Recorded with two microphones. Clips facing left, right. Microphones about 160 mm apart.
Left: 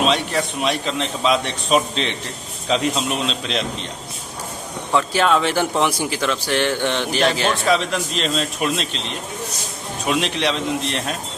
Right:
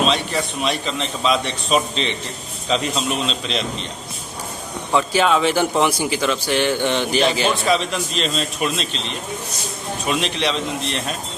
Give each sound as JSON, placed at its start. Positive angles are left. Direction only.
{"t": 0.0, "sound": "a man's voice", "side_deg": 10}
{"t": 4.9, "sound": "a man's voice", "side_deg": 0}
{"t": 10.1, "sound": "a man's voice", "side_deg": 5}